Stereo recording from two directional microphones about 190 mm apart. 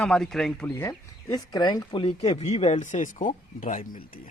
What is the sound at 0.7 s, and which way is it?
Speech, 15° left (ahead or behind).